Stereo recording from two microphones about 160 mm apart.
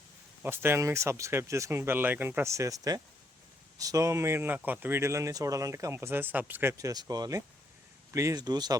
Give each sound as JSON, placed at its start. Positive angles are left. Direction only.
{"t": 0.4, "sound": "speech", "side_deg": -15}